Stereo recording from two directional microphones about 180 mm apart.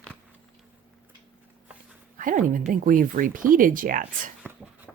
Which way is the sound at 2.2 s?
45° right (ahead or behind).